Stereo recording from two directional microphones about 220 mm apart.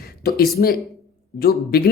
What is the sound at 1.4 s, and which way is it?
Speech, 45° left (ahead or behind).